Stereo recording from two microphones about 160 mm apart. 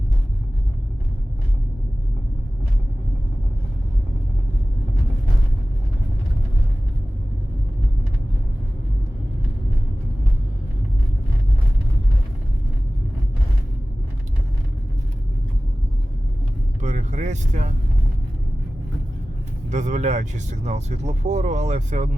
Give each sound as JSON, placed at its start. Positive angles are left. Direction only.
{"t": 16.8, "sound": "vehicle", "side_deg": -45}
{"t": 19.7, "sound": "speech", "side_deg": -50}